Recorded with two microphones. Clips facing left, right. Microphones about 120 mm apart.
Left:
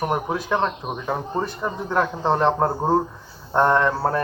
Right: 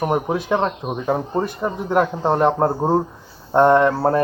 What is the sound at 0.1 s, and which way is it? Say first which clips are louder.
Speech: right 3 dB; 20° right (ahead or behind).